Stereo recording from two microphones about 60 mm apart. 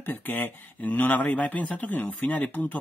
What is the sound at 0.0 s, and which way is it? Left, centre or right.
Speech, left.